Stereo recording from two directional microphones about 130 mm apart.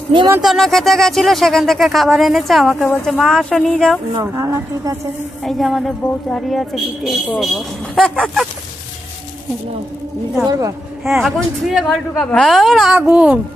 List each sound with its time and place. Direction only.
0.4 s a woman's voice: centre (ahead or behind)
4.1 s speech: 25° right (ahead or behind)
5.4 s a woman's voice: centre (ahead or behind)
10.4 s speech: 25° right (ahead or behind)
11.2 s a woman's voice: centre (ahead or behind)